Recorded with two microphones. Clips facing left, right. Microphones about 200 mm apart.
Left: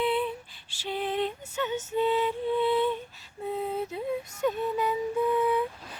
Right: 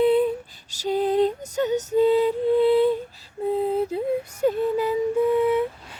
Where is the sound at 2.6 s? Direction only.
40° right (ahead or behind).